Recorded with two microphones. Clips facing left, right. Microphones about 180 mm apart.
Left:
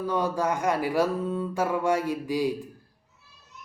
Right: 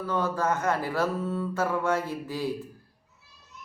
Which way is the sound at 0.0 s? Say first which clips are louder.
Left 2 dB; 15° left (ahead or behind).